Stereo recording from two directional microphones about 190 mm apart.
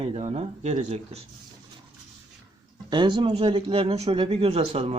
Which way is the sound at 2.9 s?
25° right (ahead or behind).